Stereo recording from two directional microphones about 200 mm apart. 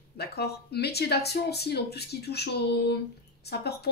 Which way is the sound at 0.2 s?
55° left (ahead or behind).